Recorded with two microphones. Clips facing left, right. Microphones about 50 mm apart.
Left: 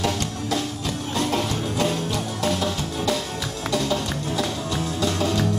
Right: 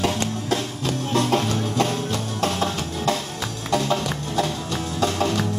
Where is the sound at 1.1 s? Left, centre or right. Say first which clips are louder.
Right 3 dB; right.